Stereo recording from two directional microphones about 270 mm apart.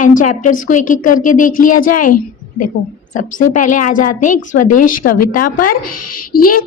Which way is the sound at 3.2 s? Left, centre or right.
Left.